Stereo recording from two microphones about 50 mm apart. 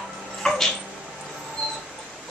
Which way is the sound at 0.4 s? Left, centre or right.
Centre.